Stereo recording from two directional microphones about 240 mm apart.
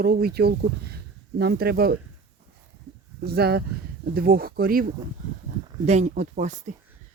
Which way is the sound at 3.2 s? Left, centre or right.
Right.